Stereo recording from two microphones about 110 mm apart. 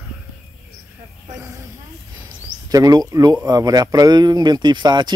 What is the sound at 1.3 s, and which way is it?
Snake, 30° right (ahead or behind).